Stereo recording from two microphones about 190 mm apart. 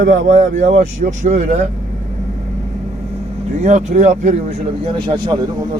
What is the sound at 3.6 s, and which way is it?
Speech, 40° right (ahead or behind).